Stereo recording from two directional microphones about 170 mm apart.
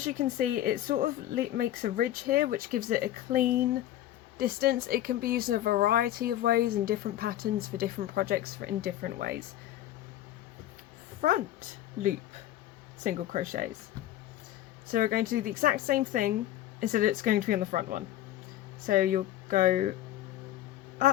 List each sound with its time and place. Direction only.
0.0 s speech: 50° right (ahead or behind)
11.2 s speech: 50° right (ahead or behind)
13.0 s speech: 50° right (ahead or behind)
14.8 s speech: 55° right (ahead or behind)
21.0 s quack: 50° right (ahead or behind)